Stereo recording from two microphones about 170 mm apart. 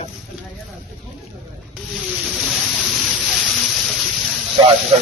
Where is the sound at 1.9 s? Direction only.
Centre (ahead or behind).